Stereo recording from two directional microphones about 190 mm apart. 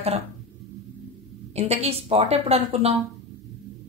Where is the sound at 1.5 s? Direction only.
35° right (ahead or behind).